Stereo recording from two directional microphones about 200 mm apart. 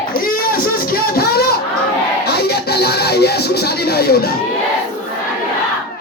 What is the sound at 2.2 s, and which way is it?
Music, 55° left (ahead or behind).